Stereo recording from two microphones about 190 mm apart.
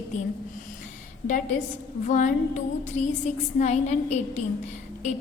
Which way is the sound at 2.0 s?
40° left (ahead or behind).